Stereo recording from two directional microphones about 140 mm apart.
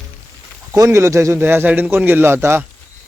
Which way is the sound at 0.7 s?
20° right (ahead or behind).